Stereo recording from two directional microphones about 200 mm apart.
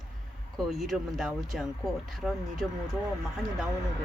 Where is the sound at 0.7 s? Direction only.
Centre (ahead or behind).